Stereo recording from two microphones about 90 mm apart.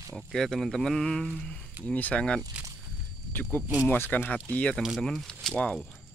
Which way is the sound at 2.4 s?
40° right (ahead or behind).